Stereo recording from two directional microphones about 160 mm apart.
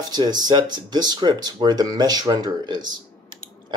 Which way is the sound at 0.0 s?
25° right (ahead or behind).